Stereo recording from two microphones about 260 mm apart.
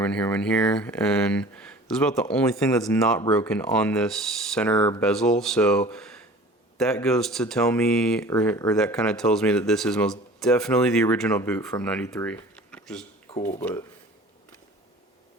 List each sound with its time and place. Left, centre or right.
0.0 s speech: centre
5.9 s a sound: centre
6.7 s speech: centre
13.3 s speech: left